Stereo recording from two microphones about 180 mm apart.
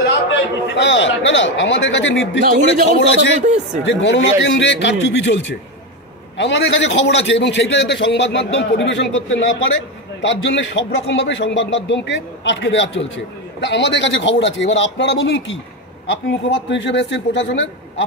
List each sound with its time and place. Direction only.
0.3 s a man's voice: 90° left
3.3 s speech: 40° right (ahead or behind)
3.8 s a man's voice: 85° left